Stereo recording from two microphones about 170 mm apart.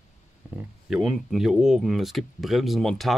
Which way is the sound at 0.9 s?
Centre (ahead or behind).